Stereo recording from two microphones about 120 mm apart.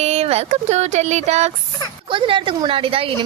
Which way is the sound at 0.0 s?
60° right (ahead or behind).